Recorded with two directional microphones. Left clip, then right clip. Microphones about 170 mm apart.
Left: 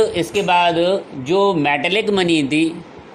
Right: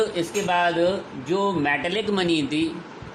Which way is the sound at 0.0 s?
40° left (ahead or behind).